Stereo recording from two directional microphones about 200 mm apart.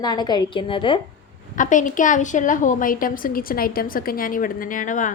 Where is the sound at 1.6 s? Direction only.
40° left (ahead or behind).